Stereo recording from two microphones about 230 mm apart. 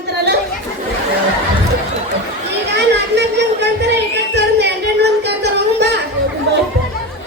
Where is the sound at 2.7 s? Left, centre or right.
Right.